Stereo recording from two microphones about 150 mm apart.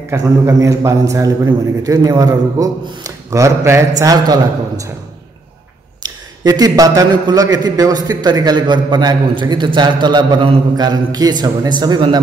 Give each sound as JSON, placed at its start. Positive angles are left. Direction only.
{"t": 0.1, "sound": "a man's voice", "side_deg": -20}
{"t": 6.0, "sound": "a man's voice", "side_deg": -25}